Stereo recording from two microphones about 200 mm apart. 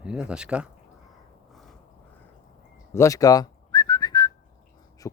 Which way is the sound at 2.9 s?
15° left (ahead or behind).